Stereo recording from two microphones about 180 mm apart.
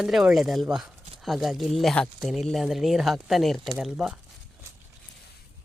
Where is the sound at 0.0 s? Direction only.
Centre (ahead or behind).